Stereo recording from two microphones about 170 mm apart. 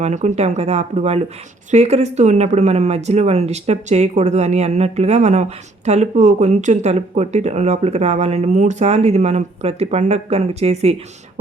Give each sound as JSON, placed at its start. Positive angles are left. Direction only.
{"t": 0.0, "sound": "speech", "side_deg": -45}